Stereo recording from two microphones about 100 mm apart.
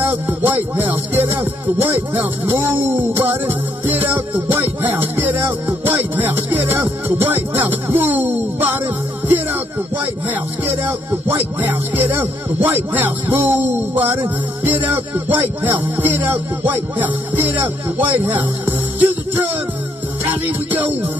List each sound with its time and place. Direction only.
0.0 s music: 20° right (ahead or behind)
18.0 s speech: 20° right (ahead or behind)